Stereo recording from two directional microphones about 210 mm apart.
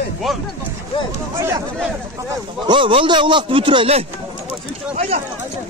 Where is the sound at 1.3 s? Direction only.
15° right (ahead or behind).